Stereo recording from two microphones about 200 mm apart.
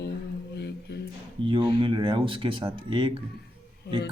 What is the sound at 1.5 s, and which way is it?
Speech, 25° right (ahead or behind).